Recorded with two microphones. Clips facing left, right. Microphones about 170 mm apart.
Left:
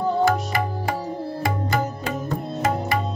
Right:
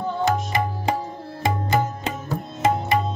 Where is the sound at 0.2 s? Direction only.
20° right (ahead or behind).